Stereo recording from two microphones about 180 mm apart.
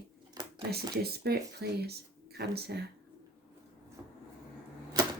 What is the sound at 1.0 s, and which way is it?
A woman's voice, 60° right (ahead or behind).